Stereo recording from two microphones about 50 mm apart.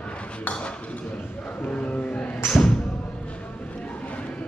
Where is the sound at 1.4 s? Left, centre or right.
Left.